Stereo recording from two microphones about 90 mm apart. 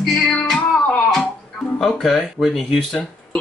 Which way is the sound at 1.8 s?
Centre (ahead or behind).